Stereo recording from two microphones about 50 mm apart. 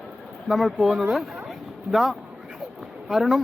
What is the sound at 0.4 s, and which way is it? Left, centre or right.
Speech, centre.